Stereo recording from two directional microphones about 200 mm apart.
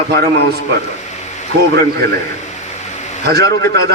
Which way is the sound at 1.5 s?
55° right (ahead or behind).